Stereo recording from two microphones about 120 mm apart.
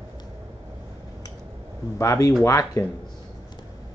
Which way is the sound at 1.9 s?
25° left (ahead or behind).